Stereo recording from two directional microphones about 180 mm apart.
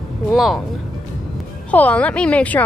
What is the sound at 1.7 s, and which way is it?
Speech, 10° left (ahead or behind).